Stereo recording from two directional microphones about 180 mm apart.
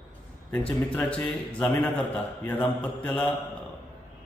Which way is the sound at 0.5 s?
5° left (ahead or behind).